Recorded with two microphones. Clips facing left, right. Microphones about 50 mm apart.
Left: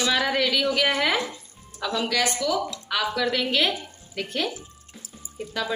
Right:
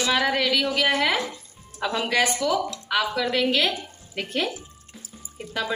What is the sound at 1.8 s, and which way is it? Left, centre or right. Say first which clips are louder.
Speech: right 2 dB; right.